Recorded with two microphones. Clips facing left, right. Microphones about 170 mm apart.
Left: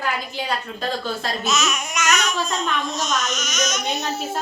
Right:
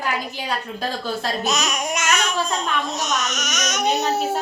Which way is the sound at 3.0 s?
70° right (ahead or behind).